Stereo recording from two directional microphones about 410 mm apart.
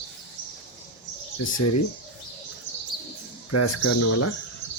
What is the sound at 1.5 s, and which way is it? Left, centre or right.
Speech, left.